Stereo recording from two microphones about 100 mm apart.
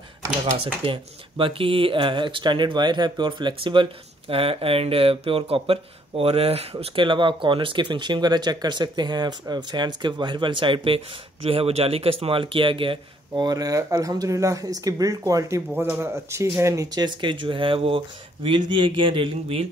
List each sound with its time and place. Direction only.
0.8 s speech: 55° right (ahead or behind); by 6.9 s 85° right
7.0 s speech: 55° right (ahead or behind)
11.4 s speech: 85° right; by 13.0 s 60° right (ahead or behind)
13.4 s speech: 40° right (ahead or behind); by 19.7 s 65° right (ahead or behind)